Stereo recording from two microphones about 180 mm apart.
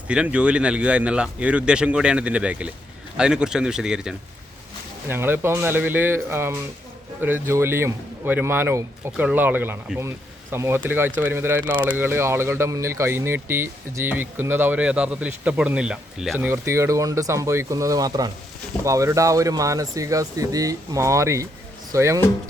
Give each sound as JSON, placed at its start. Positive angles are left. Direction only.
{"t": 0.1, "sound": "speech", "side_deg": -5}